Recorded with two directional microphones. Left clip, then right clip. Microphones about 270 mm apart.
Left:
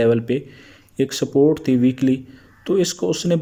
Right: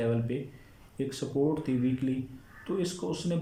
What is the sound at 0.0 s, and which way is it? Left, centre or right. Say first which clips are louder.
Speech: left 14 dB; left.